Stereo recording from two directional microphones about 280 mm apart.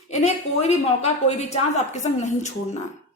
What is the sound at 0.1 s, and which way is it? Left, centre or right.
A woman's voice, left.